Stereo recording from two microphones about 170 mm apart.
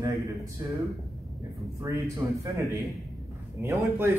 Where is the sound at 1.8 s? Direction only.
20° right (ahead or behind).